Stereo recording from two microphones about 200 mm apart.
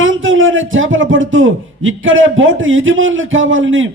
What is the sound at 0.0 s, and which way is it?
A man's voice, 75° right (ahead or behind).